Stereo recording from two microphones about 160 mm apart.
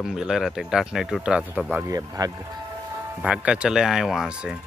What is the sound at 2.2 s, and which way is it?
Speech, 25° right (ahead or behind).